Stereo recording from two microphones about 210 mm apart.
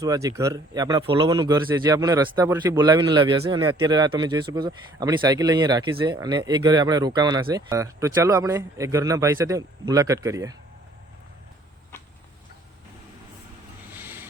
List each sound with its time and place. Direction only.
0.0 s speech: 15° right (ahead or behind)
14.0 s vehicle: 10° right (ahead or behind)